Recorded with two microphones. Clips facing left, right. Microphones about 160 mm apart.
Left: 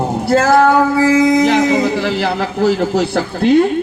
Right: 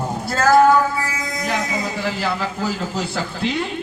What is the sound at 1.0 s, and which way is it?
A man's voice, 80° left.